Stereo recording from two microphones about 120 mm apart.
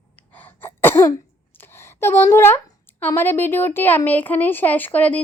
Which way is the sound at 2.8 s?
15° left (ahead or behind).